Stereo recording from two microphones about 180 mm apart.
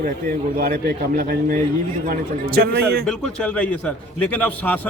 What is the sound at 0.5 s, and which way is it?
A man's voice, 50° right (ahead or behind).